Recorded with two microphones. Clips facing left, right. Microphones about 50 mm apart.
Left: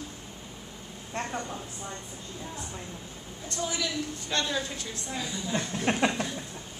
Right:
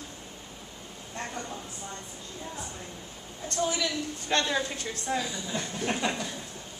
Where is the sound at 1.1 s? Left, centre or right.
Left.